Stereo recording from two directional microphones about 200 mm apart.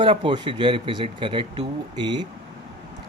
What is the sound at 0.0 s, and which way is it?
Speech, 25° right (ahead or behind).